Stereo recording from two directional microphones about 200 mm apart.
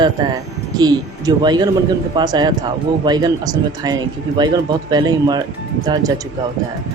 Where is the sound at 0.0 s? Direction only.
20° right (ahead or behind).